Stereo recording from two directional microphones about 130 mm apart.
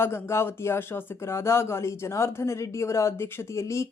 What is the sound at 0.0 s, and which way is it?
Speech, 20° left (ahead or behind).